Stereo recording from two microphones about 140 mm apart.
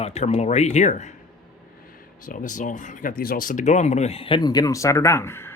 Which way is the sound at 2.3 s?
65° left (ahead or behind).